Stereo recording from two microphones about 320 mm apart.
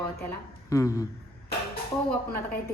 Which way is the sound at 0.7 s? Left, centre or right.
Centre.